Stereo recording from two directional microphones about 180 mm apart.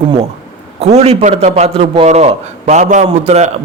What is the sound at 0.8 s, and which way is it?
A man's voice, 35° right (ahead or behind).